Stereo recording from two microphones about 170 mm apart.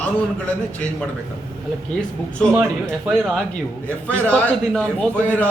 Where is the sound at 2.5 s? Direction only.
10° right (ahead or behind).